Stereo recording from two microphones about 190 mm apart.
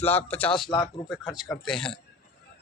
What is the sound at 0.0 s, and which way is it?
A man's voice, 10° left (ahead or behind).